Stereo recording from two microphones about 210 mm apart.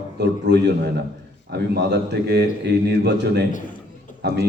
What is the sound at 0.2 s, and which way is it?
A man's voice, 50° right (ahead or behind).